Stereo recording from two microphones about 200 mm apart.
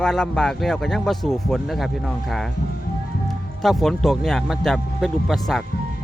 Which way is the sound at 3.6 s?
Centre (ahead or behind).